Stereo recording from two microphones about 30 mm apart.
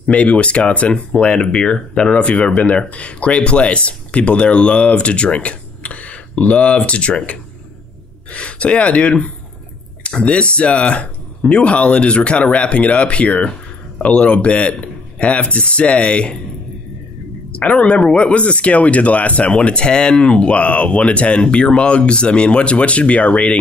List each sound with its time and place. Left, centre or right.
0.0 s speech: left
1.4 s speech: left
5.8 s a sound: left
6.3 s speech: left
8.3 s speech: left
14.0 s speech: left
17.5 s speech: left
19.7 s speech: left
20.4 s speech: left